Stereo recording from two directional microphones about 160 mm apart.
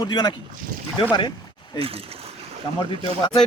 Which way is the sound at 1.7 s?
35° right (ahead or behind).